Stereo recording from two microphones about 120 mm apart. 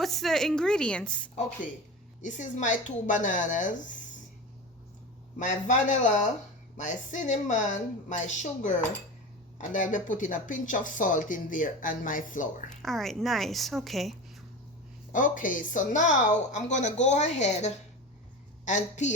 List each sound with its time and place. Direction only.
0.0 s a woman's voice: centre (ahead or behind)
2.2 s speech: 90° left
5.4 s speech: 90° left
12.7 s a woman's voice: 5° left (ahead or behind)
15.1 s a woman's voice: 90° left; by 17.7 s 70° left (ahead or behind)
18.6 s a woman's voice: 90° left